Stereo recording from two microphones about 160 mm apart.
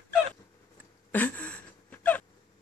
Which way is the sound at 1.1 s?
10° left (ahead or behind).